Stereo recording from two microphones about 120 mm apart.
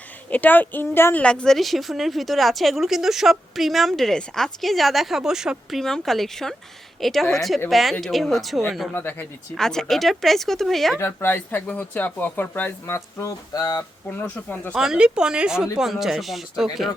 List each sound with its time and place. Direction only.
0.3 s a woman's voice: 15° left (ahead or behind)
8.9 s speech: 15° left (ahead or behind)
9.6 s a woman's voice: 5° left (ahead or behind)
10.9 s speech: 20° left (ahead or behind)
13.5 s speech: 30° left (ahead or behind)
14.1 s speech: 15° left (ahead or behind)
14.8 s a woman's voice: 5° right (ahead or behind)